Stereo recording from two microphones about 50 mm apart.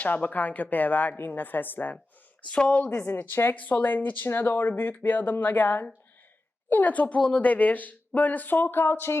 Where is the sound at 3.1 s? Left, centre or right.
Left.